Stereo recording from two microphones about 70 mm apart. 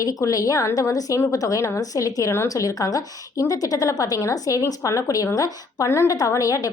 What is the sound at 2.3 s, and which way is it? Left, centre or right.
Speech, left.